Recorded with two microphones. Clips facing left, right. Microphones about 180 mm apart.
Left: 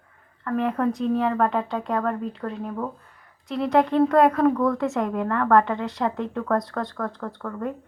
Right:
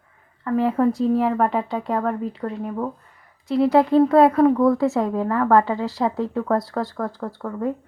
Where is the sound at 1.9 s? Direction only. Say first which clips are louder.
Right 2 dB; 15° right (ahead or behind).